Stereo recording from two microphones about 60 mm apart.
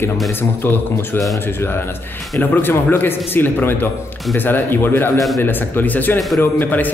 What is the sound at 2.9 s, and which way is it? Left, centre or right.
Speech, left.